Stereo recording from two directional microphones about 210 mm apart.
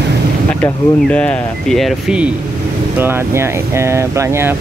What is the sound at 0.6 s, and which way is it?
Speech, 5° left (ahead or behind).